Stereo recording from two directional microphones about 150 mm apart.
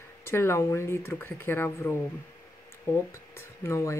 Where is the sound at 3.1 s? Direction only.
20° left (ahead or behind).